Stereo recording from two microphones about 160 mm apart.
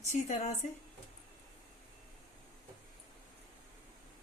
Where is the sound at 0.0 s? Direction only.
45° left (ahead or behind).